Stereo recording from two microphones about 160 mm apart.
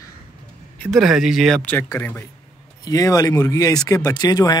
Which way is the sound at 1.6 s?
10° left (ahead or behind).